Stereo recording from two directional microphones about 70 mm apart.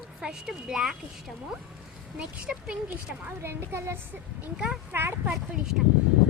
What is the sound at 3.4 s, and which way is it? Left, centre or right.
A woman's voice, right.